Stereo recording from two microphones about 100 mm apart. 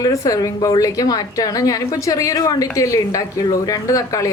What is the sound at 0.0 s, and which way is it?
A woman's voice, 35° left (ahead or behind).